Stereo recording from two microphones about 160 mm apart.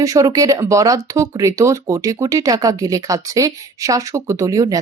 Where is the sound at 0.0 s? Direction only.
20° right (ahead or behind).